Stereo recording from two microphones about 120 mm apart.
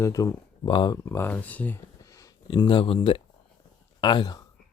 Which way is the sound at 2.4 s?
40° left (ahead or behind).